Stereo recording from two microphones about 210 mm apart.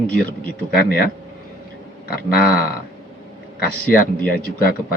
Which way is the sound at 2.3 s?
45° left (ahead or behind).